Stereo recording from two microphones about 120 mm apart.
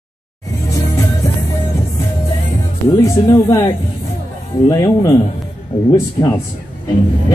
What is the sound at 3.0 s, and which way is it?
Music, 25° left (ahead or behind).